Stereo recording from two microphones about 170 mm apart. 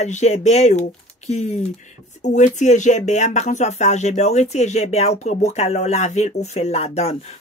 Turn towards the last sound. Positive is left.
turn(degrees=40)  # may be behind; listen again after turning